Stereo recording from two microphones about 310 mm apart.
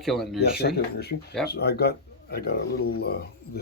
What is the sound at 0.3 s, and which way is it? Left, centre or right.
Speech, left.